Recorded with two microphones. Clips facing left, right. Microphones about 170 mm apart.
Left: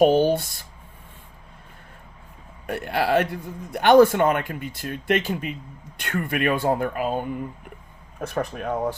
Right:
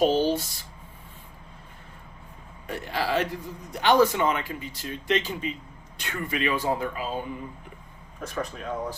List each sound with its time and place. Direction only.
0.0 s a man's voice: 55° left (ahead or behind)
2.6 s a man's voice: 60° left (ahead or behind)